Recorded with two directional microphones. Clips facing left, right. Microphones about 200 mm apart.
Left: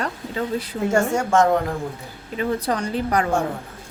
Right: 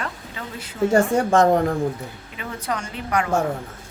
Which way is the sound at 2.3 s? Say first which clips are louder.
Left 7 dB; 35° left (ahead or behind).